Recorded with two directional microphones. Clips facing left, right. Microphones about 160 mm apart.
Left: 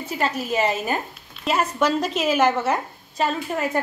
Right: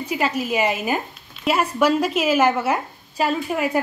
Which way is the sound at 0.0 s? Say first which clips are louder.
Right 2 dB; 10° right (ahead or behind).